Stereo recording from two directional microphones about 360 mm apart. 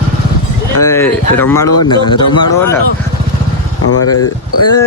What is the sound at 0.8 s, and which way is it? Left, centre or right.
Speech, centre.